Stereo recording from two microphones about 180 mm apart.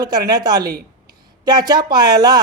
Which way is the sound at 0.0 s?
20° right (ahead or behind).